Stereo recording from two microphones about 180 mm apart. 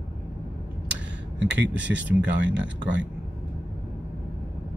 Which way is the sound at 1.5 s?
80° right.